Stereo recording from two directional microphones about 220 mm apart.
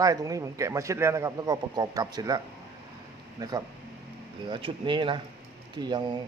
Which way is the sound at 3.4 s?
15° right (ahead or behind).